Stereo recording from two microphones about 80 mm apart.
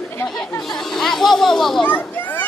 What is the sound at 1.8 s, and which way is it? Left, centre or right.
Children playing, left.